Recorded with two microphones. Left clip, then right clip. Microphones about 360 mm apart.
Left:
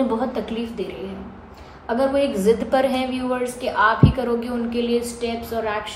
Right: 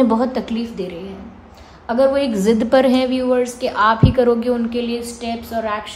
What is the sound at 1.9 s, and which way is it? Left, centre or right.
A woman's voice, right.